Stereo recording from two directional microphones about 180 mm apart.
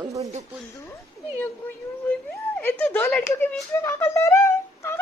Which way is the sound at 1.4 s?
10° left (ahead or behind).